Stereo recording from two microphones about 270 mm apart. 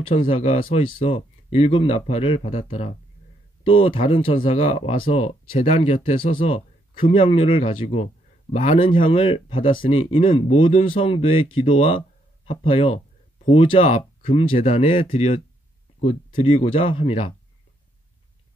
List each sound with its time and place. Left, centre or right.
0.1 s a man's voice: left
12.4 s a man's voice: left